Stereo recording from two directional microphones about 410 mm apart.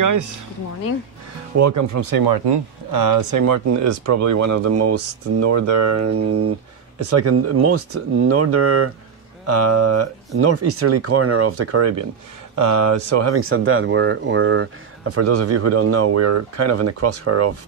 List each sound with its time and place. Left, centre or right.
0.0 s speech: right
1.6 s speech: right